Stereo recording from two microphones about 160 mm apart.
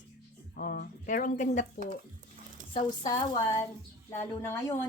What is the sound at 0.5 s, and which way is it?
Speech, 65° left (ahead or behind).